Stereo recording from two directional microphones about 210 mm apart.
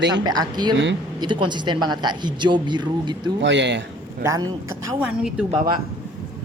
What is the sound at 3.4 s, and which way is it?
Speech, 55° right (ahead or behind).